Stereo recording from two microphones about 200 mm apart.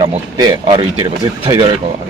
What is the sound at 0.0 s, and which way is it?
A man's voice, 20° right (ahead or behind).